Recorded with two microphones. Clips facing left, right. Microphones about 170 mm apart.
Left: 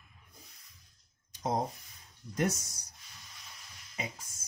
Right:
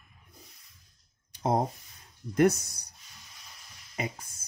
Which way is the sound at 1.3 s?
60° right (ahead or behind).